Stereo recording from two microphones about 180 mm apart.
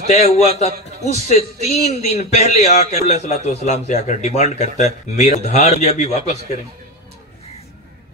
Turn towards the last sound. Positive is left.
turn(degrees=35)  # may be behind; listen again after turning